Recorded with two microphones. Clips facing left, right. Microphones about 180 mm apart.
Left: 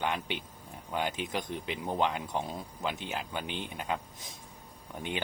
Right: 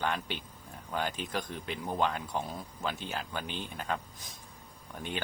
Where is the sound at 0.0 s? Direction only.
15° left (ahead or behind).